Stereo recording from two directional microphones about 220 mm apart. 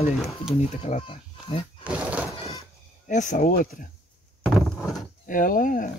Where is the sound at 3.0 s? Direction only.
35° left (ahead or behind).